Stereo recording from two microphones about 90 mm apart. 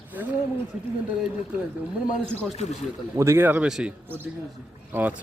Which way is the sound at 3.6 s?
5° right (ahead or behind).